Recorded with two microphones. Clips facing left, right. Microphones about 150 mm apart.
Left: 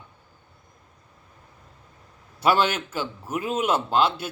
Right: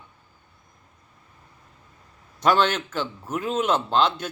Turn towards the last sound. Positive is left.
turn(degrees=10)  # may be behind; listen again after turning